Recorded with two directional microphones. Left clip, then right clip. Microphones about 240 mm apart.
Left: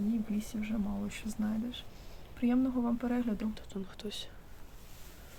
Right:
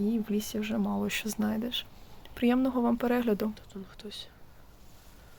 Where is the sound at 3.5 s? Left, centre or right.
Centre.